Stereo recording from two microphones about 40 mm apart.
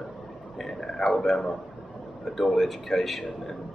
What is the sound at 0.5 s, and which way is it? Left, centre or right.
Speech, centre.